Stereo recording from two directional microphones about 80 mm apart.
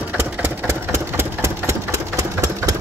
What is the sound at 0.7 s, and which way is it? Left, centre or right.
Sewing machine, right.